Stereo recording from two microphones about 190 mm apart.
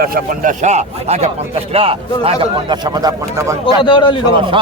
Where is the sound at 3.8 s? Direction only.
25° left (ahead or behind).